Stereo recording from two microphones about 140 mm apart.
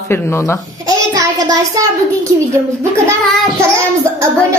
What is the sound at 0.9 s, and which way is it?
Speech, 25° right (ahead or behind).